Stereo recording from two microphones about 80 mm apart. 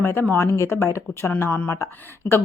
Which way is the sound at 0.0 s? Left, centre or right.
Left.